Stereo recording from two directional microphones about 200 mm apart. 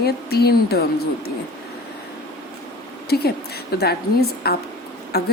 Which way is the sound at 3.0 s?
50° left (ahead or behind).